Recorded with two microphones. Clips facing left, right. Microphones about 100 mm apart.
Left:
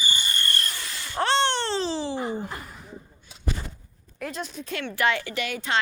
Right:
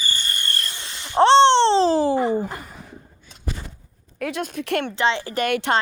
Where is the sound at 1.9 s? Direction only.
45° right (ahead or behind).